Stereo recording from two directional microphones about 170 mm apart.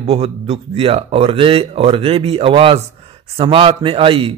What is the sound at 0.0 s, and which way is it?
A man's voice, 35° right (ahead or behind).